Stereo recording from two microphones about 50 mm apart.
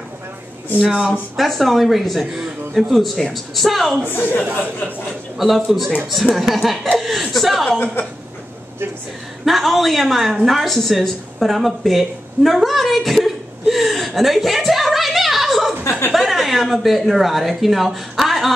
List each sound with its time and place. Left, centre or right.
0.7 s speech: centre
1.3 s speech: centre
4.1 s speech: left
5.4 s speech: centre
7.8 s speech: left
9.4 s a woman's voice: centre